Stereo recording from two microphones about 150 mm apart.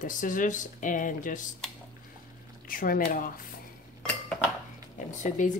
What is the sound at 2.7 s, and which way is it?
Speech, 70° left (ahead or behind).